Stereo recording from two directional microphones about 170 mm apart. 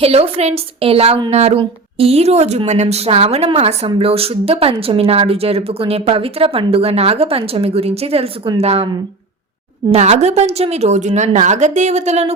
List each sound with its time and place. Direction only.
0.0 s speech: 35° right (ahead or behind)
9.9 s speech: 40° right (ahead or behind)